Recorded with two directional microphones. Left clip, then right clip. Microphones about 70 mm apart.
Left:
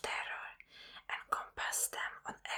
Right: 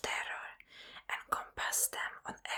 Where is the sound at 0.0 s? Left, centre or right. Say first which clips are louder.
Right 2 dB; right.